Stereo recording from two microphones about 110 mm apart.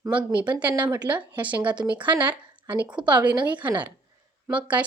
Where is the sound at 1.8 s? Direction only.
45° right (ahead or behind).